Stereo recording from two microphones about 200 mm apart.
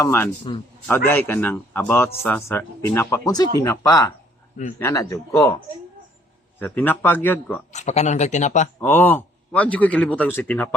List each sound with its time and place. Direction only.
0.0 s speech: 10° left (ahead or behind)
0.5 s a man's voice: 25° left (ahead or behind)
0.9 s speech: 10° left (ahead or behind)
6.6 s speech: 10° left (ahead or behind)
7.7 s speech: 35° left (ahead or behind)
8.8 s speech: 10° left (ahead or behind)